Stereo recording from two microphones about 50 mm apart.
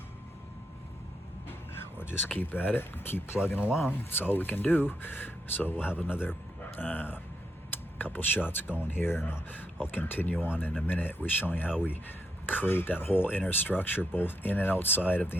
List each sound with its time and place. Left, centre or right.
1.5 s vehicle: left
2.3 s speech: left
3.3 s speech: left
3.8 s speech: left